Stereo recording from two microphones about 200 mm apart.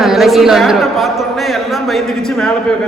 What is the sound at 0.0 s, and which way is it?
A woman's voice, centre (ahead or behind).